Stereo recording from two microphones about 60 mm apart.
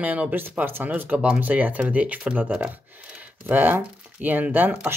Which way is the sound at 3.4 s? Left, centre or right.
Right.